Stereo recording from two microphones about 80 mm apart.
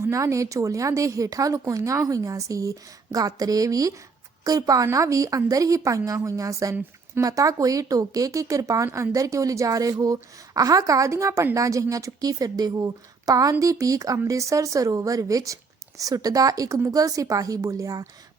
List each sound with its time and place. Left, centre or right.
0.0 s speech: right